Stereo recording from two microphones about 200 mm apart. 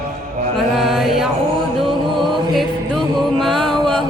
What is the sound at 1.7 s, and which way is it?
Mantra, centre (ahead or behind).